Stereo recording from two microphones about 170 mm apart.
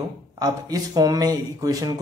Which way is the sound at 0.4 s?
20° right (ahead or behind).